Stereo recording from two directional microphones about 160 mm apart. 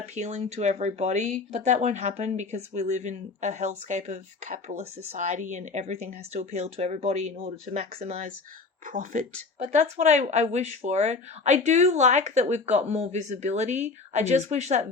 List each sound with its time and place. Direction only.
0.0 s speech: 45° right (ahead or behind)
8.9 s speech: 50° right (ahead or behind)